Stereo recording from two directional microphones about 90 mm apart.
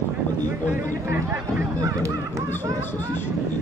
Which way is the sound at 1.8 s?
35° right (ahead or behind).